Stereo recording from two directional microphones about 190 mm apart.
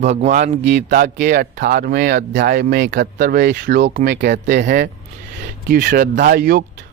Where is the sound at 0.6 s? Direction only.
65° right (ahead or behind).